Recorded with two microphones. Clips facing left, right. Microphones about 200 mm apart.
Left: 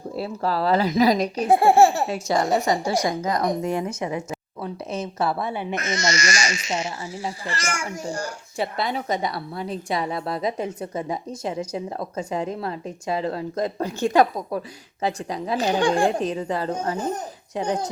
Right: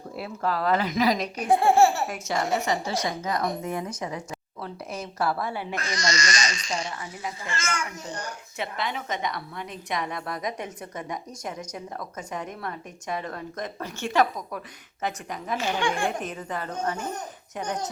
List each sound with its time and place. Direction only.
0.2 s a woman's voice: 30° left (ahead or behind)
3.6 s a woman's voice: 30° left (ahead or behind)